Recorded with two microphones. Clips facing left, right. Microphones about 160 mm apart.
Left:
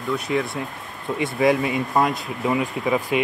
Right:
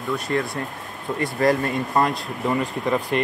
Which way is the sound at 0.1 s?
Centre (ahead or behind).